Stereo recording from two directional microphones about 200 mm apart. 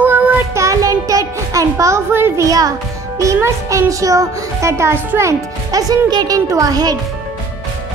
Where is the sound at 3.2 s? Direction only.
15° right (ahead or behind).